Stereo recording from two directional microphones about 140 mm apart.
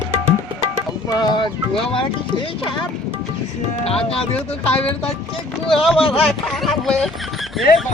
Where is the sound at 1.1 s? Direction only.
30° left (ahead or behind).